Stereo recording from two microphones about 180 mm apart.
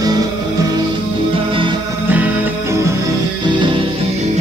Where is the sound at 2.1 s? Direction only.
10° right (ahead or behind).